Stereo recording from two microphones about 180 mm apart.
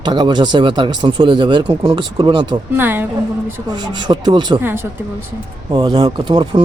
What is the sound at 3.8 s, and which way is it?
Speech, 25° right (ahead or behind).